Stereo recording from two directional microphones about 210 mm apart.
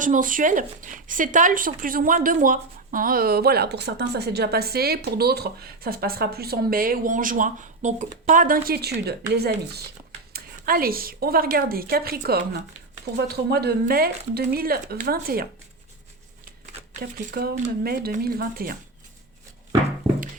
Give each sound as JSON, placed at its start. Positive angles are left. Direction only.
{"t": 0.0, "sound": "speech", "side_deg": -40}
{"t": 17.0, "sound": "speech", "side_deg": -45}